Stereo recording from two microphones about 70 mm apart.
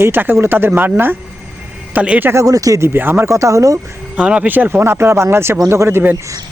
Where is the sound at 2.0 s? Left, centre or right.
Right.